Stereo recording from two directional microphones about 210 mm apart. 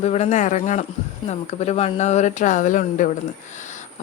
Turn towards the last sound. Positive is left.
turn(degrees=35)  # may be behind; listen again after turning